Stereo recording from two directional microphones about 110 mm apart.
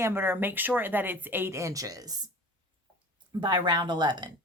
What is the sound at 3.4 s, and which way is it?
Speech, 45° right (ahead or behind).